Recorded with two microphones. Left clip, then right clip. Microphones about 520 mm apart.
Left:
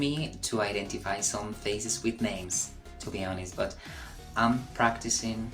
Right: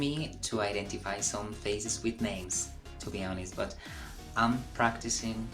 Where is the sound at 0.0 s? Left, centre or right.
Right.